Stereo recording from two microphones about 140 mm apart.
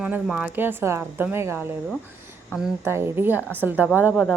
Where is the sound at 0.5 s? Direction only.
15° right (ahead or behind).